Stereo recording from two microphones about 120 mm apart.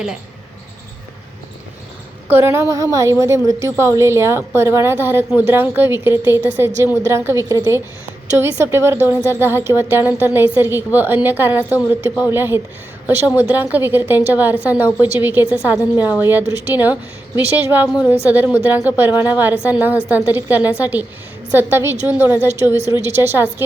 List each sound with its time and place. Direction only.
2.3 s a woman's voice: 20° right (ahead or behind)